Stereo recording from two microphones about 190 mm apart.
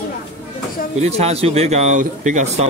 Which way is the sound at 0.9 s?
35° right (ahead or behind).